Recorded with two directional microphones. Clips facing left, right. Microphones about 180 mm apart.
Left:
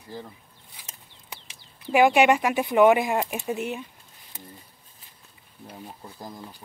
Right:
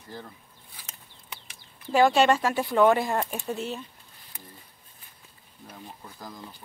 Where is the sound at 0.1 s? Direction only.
10° left (ahead or behind).